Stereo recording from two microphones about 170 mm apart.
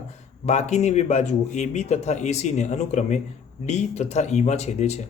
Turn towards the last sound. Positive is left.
turn(degrees=40)  # may be behind; listen again after turning